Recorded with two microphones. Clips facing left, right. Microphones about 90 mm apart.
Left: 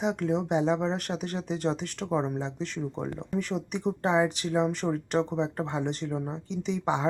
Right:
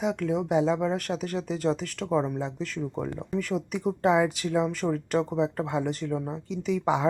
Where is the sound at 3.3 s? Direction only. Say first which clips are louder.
Right 1 dB; centre (ahead or behind).